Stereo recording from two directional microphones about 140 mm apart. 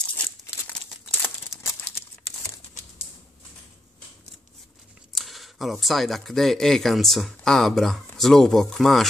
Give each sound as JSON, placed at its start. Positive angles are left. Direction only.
{"t": 1.2, "sound": "crumpling", "side_deg": 20}
{"t": 5.1, "sound": "speech", "side_deg": 0}